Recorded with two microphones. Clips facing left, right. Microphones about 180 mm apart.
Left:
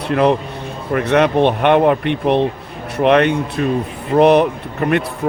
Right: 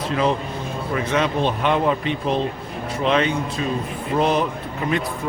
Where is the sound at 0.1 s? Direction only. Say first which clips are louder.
Left 7 dB; 65° left (ahead or behind).